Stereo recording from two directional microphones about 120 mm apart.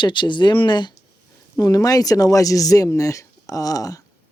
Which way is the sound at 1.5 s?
30° left (ahead or behind).